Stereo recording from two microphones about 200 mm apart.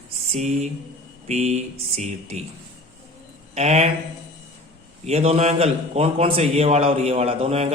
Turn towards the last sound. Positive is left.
turn(degrees=-30)  # may be behind; listen again after turning